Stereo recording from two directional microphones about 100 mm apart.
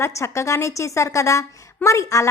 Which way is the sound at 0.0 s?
30° left (ahead or behind).